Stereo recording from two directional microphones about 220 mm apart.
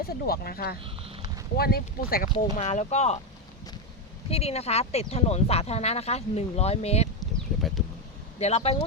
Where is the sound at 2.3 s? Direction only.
30° left (ahead or behind).